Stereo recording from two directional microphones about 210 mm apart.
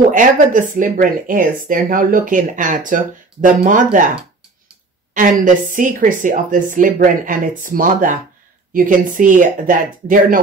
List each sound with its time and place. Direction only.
0.1 s speech: 40° right (ahead or behind)
5.1 s speech: 40° right (ahead or behind)